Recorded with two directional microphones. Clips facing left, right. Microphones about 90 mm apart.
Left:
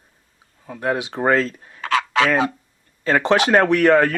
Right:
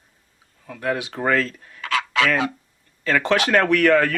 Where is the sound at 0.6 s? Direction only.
25° left (ahead or behind).